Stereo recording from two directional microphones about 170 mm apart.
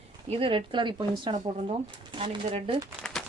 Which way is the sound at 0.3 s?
35° right (ahead or behind).